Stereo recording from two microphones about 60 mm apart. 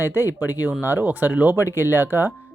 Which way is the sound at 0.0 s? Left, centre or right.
Right.